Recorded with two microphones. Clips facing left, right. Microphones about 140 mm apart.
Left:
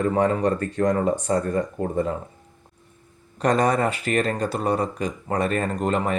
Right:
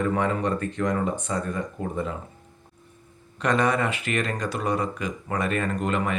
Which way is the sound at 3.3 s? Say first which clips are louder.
Left 3 dB; 40° left (ahead or behind).